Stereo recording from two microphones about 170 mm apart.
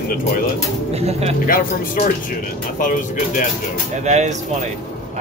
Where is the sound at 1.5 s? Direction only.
55° left (ahead or behind).